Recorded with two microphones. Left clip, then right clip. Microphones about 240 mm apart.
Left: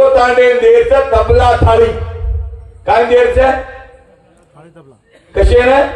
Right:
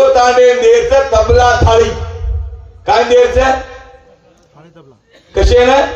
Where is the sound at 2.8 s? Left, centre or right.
Right.